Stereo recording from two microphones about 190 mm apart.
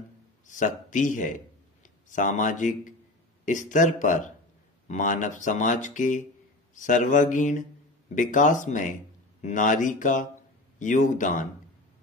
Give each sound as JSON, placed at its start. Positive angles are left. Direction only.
{"t": 0.5, "sound": "speech", "side_deg": 40}